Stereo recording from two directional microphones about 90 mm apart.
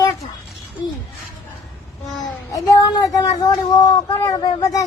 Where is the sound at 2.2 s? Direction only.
45° left (ahead or behind).